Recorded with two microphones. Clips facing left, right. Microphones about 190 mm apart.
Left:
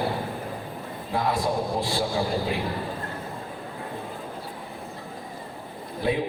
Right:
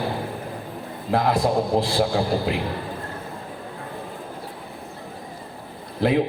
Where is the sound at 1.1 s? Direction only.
80° right.